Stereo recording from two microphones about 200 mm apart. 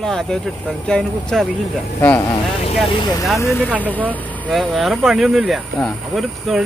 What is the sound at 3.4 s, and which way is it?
Speech, 15° left (ahead or behind).